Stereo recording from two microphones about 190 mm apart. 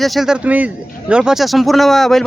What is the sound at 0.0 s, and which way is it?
Speech, centre (ahead or behind).